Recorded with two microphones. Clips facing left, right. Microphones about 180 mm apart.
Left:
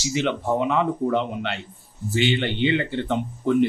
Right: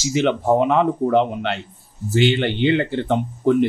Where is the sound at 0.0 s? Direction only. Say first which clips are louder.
Right 5 dB; 50° right (ahead or behind).